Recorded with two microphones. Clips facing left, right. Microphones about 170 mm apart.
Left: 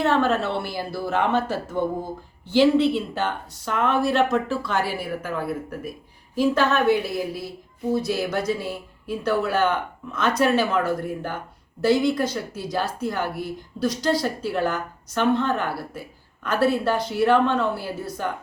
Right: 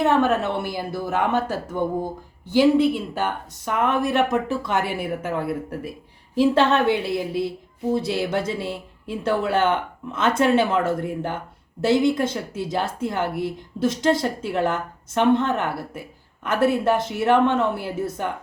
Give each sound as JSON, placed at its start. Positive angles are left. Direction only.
{"t": 0.0, "sound": "a woman's voice", "side_deg": -15}